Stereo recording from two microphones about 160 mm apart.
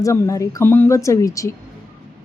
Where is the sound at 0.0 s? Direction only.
20° left (ahead or behind).